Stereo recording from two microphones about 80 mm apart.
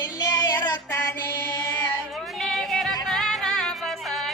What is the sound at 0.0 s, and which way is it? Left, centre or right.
Child singing, left.